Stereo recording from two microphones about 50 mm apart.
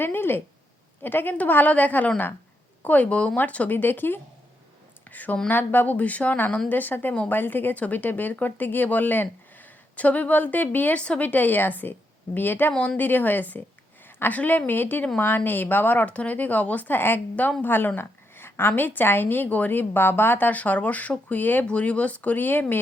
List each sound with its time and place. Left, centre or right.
0.0 s a woman's voice: left
5.1 s a woman's voice: left
21.7 s speech: left